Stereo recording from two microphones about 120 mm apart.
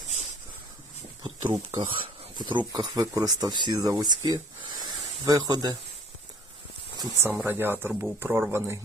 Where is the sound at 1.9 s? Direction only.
40° right (ahead or behind).